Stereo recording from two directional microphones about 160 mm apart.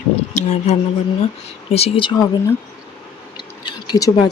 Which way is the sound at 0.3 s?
45° left (ahead or behind).